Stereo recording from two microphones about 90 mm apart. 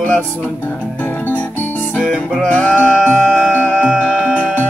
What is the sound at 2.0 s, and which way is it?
Music, centre (ahead or behind).